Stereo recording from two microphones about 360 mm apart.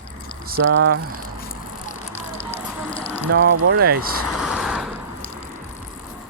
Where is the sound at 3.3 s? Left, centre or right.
Right.